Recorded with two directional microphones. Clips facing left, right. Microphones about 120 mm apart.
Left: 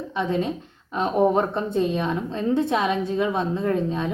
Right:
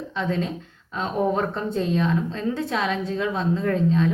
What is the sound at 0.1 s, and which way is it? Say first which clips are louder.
A woman's voice: left 2 dB; 15° left (ahead or behind).